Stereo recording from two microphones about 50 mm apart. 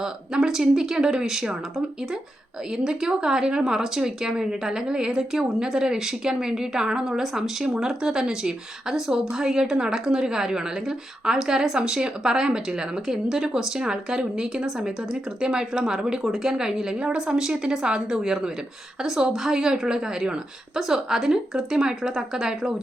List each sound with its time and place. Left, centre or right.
0.0 s speech: centre
2.7 s speech: centre